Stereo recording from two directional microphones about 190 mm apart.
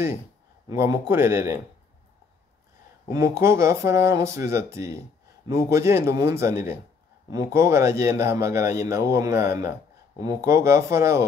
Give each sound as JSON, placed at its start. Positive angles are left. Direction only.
{"t": 0.7, "sound": "speech", "side_deg": -15}
{"t": 3.1, "sound": "speech", "side_deg": -15}